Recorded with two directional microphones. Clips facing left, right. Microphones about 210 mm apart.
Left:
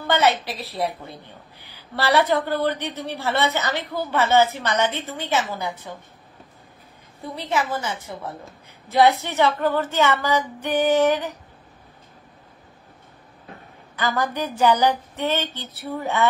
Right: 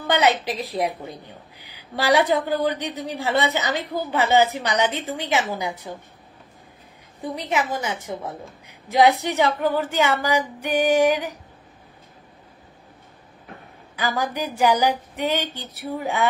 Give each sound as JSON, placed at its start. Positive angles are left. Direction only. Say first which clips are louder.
{"t": 0.0, "sound": "a woman's voice", "louder": "even", "side_deg": -15}
{"t": 7.3, "sound": "a woman's voice", "louder": "even", "side_deg": -15}
{"t": 13.9, "sound": "a woman's voice", "louder": "left 1 dB", "side_deg": -10}